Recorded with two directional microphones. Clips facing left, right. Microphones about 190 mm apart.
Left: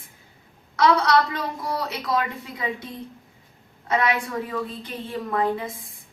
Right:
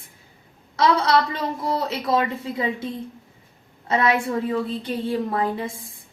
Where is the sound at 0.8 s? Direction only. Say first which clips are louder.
Even; 25° right (ahead or behind).